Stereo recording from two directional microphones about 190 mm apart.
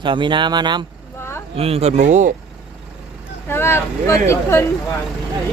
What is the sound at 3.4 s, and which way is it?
Speech, 10° left (ahead or behind).